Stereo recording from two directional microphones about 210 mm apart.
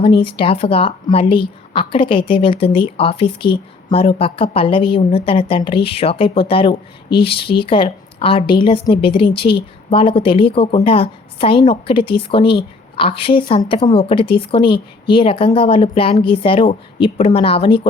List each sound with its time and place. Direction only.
0.2 s a woman's voice: 25° left (ahead or behind)